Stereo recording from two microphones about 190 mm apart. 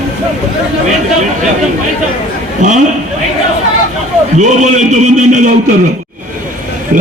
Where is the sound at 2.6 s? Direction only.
40° right (ahead or behind).